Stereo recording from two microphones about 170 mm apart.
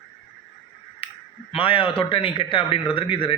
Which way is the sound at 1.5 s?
30° left (ahead or behind).